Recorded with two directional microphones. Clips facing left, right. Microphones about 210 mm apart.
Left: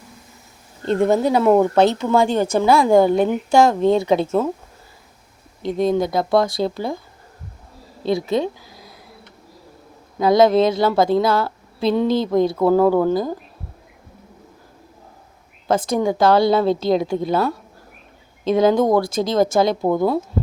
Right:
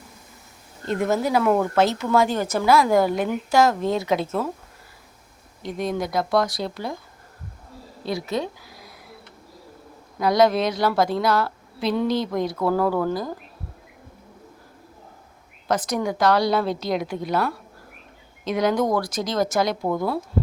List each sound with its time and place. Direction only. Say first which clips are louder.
0.9 s a woman's voice: left 6 dB; 30° left (ahead or behind)
5.6 s a woman's voice: left 7 dB; 25° left (ahead or behind)
8.0 s speech: left 7 dB; 25° left (ahead or behind)
10.2 s a woman's voice: left 5 dB; 25° left (ahead or behind)
15.6 s a woman's voice: left 5 dB; 25° left (ahead or behind)